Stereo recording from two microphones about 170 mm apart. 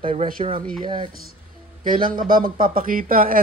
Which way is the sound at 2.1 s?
55° right (ahead or behind).